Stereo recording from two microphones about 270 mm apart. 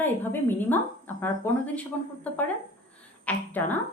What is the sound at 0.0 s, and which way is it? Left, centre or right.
A woman's voice, centre.